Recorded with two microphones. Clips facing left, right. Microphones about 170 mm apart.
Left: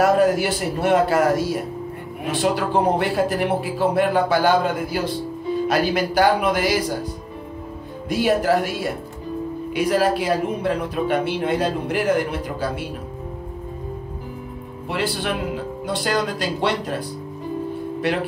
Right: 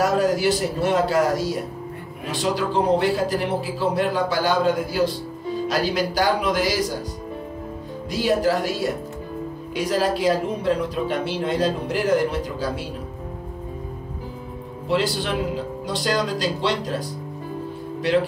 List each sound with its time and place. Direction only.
0.0 s speech: 55° left (ahead or behind)
2.5 s speech: 55° left (ahead or behind)
8.1 s speech: 55° left (ahead or behind)
15.9 s speech: 55° left (ahead or behind)